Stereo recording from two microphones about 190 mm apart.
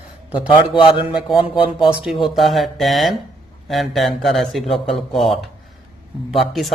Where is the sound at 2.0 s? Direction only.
Centre (ahead or behind).